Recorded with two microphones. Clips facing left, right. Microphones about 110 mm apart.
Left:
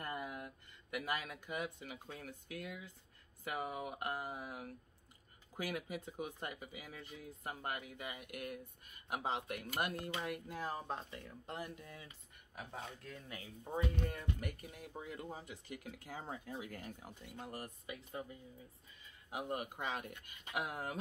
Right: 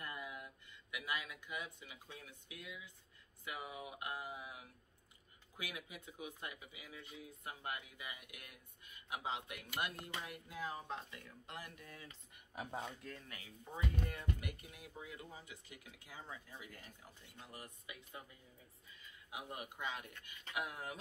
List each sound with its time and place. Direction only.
0.0 s a sound: 45° left (ahead or behind)
0.9 s speech: 45° left (ahead or behind)
11.6 s speech: 25° left (ahead or behind)
12.8 s speech: centre (ahead or behind)
13.3 s speech: 30° left (ahead or behind)
14.1 s speech: 40° left (ahead or behind)
19.3 s speech: 45° left (ahead or behind)